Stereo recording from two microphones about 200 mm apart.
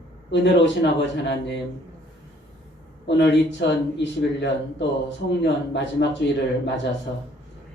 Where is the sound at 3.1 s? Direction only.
60° left (ahead or behind).